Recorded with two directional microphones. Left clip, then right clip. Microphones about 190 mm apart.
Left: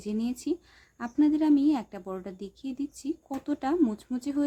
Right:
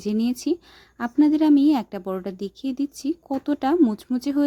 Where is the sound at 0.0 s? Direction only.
35° right (ahead or behind).